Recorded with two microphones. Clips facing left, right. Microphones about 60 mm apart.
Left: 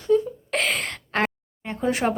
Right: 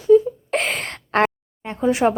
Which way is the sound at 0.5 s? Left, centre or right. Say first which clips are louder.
Right 1 dB; right.